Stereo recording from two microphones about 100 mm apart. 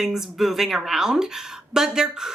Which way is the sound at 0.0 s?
5° right (ahead or behind).